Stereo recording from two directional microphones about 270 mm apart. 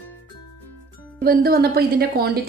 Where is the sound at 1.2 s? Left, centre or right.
Right.